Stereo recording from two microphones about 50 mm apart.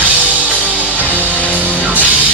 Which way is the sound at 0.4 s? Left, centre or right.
Right.